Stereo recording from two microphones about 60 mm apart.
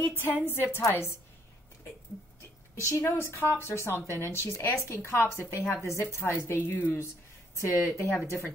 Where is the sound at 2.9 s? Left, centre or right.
Left.